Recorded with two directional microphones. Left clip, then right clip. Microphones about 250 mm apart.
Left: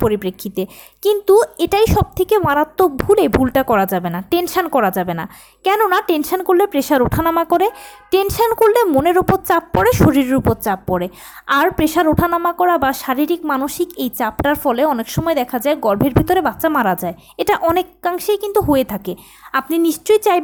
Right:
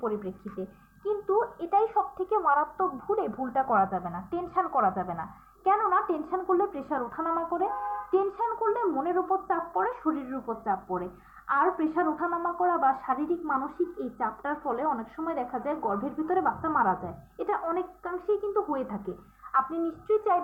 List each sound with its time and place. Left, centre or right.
0.0 s a woman's voice: left